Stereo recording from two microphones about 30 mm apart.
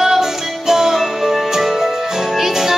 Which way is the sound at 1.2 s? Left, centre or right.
Centre.